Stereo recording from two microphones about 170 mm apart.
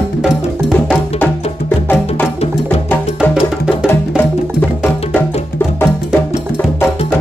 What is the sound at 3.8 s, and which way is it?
Music, 10° left (ahead or behind).